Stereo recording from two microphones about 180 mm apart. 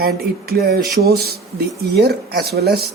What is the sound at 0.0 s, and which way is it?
Speech, 60° right (ahead or behind).